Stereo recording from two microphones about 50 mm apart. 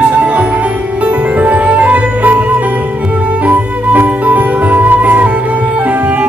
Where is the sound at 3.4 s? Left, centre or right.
Right.